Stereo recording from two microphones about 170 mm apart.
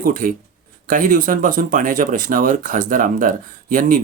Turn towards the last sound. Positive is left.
turn(degrees=-55)  # may be behind; listen again after turning